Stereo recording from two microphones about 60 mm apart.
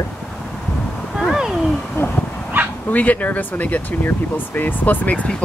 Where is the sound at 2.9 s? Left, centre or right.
Left.